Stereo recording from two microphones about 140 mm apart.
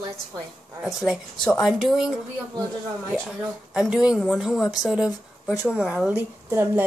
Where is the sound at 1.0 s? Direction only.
Centre (ahead or behind).